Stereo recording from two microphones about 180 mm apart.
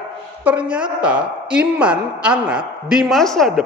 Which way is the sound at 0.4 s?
5° right (ahead or behind).